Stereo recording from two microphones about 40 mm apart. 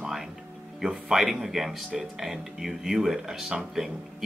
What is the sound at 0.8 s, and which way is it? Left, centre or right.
Speech, centre.